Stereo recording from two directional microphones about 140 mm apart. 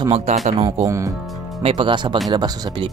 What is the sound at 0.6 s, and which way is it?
Speech, 25° right (ahead or behind).